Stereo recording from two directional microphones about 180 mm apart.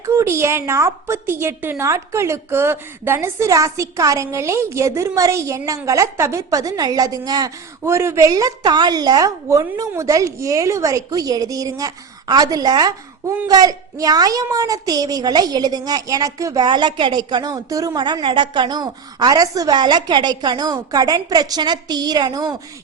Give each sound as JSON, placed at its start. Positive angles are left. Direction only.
{"t": 0.0, "sound": "a woman's voice", "side_deg": -15}